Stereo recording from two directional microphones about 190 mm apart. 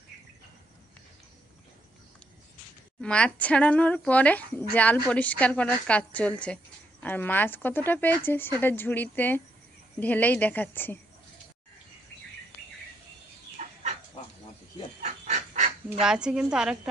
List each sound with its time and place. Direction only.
3.0 s speech: 5° left (ahead or behind)
13.6 s chicken: 40° right (ahead or behind)
15.0 s goose: 35° right (ahead or behind)
16.0 s a woman's voice: 5° right (ahead or behind)